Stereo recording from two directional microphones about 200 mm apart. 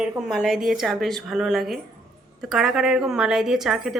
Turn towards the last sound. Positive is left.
turn(degrees=0)  # may be behind; listen again after turning